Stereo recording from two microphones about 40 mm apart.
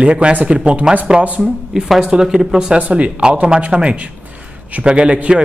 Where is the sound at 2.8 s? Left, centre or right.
Right.